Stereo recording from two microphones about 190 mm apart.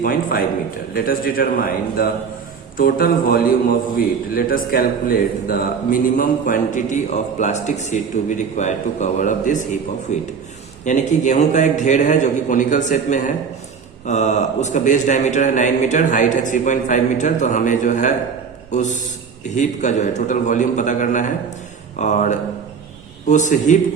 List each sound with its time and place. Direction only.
0.0 s a man's voice: 50° left (ahead or behind)
10.8 s a man's voice: 40° left (ahead or behind)